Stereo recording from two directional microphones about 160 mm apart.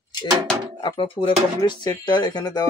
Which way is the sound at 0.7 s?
30° left (ahead or behind).